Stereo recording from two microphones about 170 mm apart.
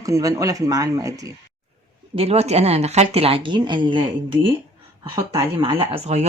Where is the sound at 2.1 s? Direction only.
35° right (ahead or behind).